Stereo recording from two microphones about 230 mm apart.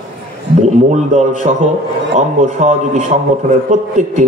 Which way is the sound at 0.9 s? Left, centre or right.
Right.